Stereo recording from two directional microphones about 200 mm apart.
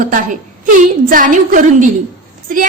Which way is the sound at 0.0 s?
40° right (ahead or behind).